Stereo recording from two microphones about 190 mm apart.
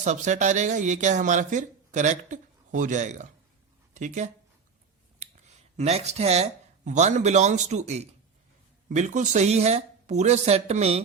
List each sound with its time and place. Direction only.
0.0 s speech: 40° right (ahead or behind)
5.7 s speech: 35° right (ahead or behind)